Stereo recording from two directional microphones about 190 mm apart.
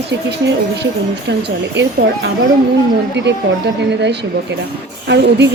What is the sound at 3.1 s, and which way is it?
A woman's voice, 65° right (ahead or behind).